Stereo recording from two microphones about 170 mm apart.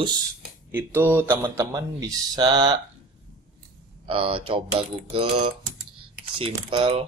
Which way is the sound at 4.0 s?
30° right (ahead or behind).